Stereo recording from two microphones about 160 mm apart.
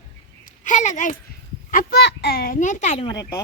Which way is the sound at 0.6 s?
50° left (ahead or behind).